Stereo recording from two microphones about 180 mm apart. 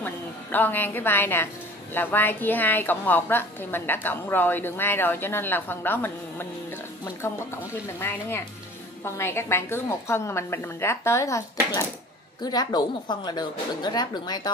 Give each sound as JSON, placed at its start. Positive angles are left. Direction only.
{"t": 0.0, "sound": "a woman's voice", "side_deg": 10}